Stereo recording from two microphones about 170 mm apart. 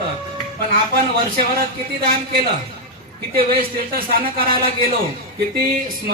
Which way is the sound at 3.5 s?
60° right (ahead or behind).